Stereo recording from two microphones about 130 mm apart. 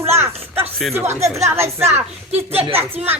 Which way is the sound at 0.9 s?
20° right (ahead or behind).